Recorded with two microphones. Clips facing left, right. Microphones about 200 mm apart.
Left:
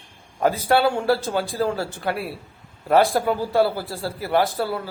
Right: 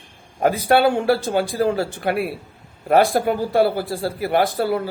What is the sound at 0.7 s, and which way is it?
Speech, 15° right (ahead or behind).